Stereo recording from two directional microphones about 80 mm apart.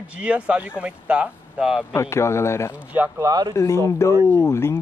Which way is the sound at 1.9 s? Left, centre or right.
Left.